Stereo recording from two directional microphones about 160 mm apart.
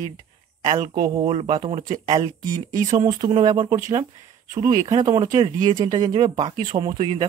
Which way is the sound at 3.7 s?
55° right (ahead or behind).